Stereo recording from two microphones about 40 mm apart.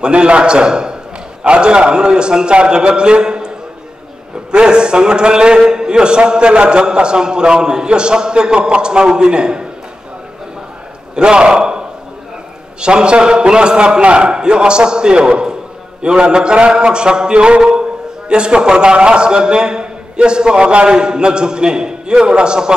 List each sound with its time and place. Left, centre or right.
0.0 s a man's voice: right
11.1 s a man's voice: right
12.8 s a man's voice: right